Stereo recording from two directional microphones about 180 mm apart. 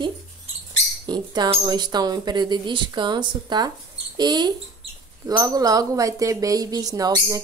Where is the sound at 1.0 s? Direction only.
25° right (ahead or behind).